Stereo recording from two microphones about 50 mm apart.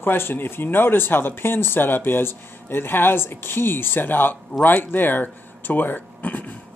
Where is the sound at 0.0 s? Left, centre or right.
Left.